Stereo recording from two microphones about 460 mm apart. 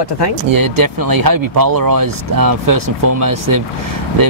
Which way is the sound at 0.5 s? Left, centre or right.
Right.